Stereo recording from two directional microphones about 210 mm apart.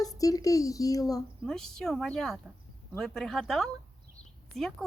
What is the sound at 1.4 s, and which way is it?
Speech, 5° left (ahead or behind).